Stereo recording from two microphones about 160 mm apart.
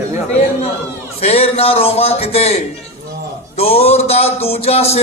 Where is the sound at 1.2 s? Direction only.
40° left (ahead or behind).